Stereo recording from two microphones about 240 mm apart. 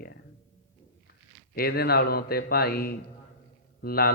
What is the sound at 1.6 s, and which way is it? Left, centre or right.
A man's voice, left.